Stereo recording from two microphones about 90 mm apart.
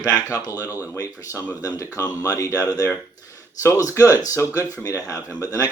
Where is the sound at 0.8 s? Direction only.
40° left (ahead or behind).